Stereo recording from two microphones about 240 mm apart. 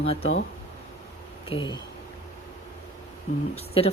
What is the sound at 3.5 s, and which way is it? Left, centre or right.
Speech, left.